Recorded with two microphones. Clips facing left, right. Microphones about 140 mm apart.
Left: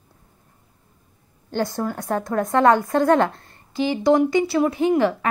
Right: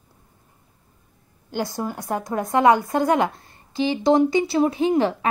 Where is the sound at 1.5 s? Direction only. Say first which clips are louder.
Left 2 dB; 10° right (ahead or behind).